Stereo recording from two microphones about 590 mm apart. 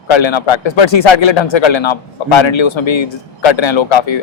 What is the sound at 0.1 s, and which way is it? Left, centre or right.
Speech, left.